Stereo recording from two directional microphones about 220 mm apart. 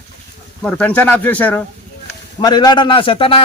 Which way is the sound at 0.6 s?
5° left (ahead or behind).